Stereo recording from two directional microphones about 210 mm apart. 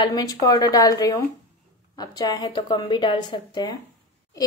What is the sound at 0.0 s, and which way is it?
A woman's voice, 20° left (ahead or behind).